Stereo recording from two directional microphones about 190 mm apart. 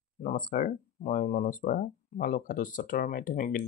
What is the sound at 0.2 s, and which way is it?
Speech, 45° left (ahead or behind).